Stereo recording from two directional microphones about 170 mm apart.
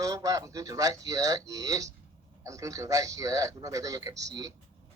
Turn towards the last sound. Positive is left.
turn(degrees=-20)  # may be behind; listen again after turning